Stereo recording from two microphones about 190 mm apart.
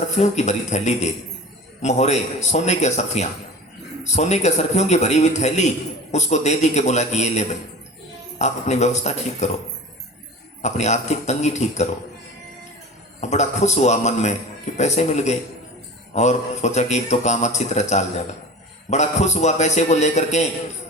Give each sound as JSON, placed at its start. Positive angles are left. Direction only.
{"t": 0.2, "sound": "a man's voice", "side_deg": 35}
{"t": 10.6, "sound": "a man's voice", "side_deg": 35}
{"t": 13.2, "sound": "a man's voice", "side_deg": 35}